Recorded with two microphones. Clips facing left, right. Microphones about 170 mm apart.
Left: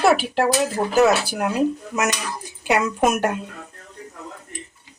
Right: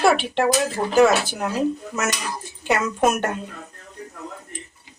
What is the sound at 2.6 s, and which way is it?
Speech, 10° left (ahead or behind).